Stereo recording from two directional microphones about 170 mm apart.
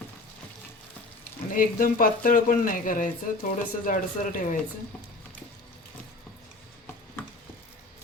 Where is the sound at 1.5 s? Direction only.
55° left (ahead or behind).